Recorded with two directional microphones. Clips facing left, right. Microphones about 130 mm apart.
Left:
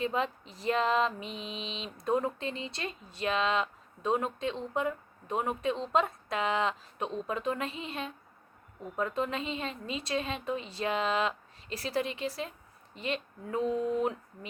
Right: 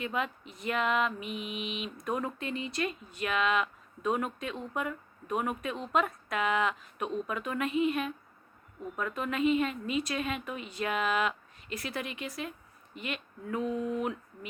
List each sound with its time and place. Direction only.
0.0 s female singing: 30° left (ahead or behind)